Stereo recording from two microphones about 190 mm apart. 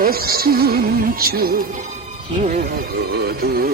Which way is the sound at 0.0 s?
50° right (ahead or behind).